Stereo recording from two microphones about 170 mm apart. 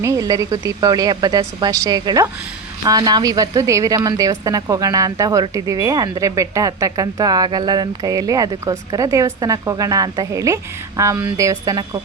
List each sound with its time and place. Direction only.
0.0 s a woman's voice: 20° right (ahead or behind)